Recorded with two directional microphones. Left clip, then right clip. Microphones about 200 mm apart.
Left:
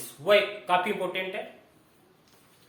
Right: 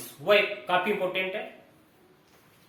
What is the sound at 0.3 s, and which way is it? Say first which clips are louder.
A man's voice: left 1 dB; 30° left (ahead or behind).